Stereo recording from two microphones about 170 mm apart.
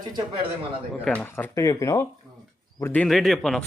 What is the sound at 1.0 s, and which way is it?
A man's voice, 5° left (ahead or behind).